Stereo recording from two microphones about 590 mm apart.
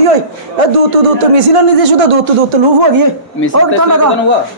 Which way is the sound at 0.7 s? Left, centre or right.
Right.